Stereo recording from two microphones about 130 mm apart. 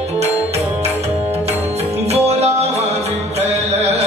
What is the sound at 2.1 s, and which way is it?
Music, 55° right (ahead or behind).